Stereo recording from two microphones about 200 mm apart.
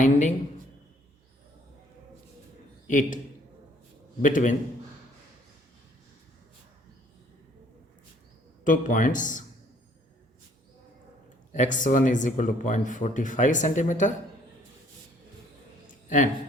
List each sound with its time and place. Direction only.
0.0 s a sound: 35° left (ahead or behind)
2.8 s a man's voice: 40° left (ahead or behind)
4.2 s speech: 40° left (ahead or behind)
8.6 s speech: 40° left (ahead or behind)
11.5 s speech: 40° left (ahead or behind)
16.0 s a man's voice: 40° left (ahead or behind)